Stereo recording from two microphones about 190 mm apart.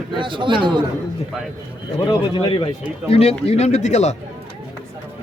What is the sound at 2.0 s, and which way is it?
A man's voice, 25° left (ahead or behind).